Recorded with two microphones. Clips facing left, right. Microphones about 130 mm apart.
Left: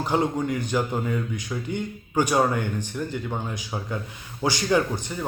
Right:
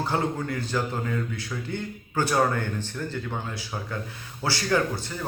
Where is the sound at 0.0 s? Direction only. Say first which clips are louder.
Left 3 dB; 15° left (ahead or behind).